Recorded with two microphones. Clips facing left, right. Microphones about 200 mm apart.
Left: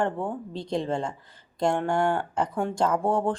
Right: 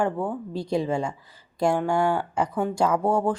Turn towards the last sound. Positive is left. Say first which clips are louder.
# right 2 dB
turn(degrees=-5)  # may be behind; listen again after turning